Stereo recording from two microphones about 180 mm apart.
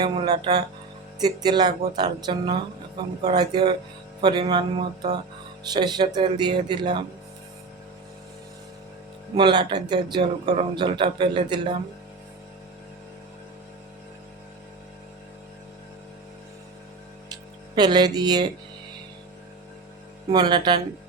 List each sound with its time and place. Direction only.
0.0 s speech: 25° right (ahead or behind)
9.3 s speech: 25° right (ahead or behind)
17.7 s speech: 25° right (ahead or behind)
20.3 s speech: 25° right (ahead or behind)